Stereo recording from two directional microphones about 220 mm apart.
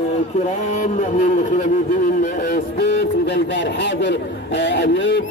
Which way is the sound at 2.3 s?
50° left (ahead or behind).